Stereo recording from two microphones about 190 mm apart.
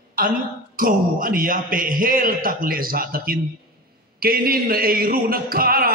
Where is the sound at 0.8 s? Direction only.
45° right (ahead or behind).